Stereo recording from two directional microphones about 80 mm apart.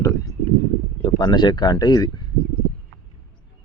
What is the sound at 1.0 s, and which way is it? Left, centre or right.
Speech, left.